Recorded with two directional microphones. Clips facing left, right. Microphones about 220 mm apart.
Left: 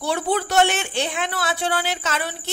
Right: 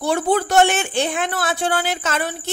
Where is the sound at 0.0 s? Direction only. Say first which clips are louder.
Right 4 dB; 45° right (ahead or behind).